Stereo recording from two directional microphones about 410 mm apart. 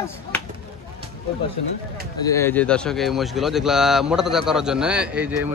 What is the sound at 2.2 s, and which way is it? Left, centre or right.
A man's voice, centre.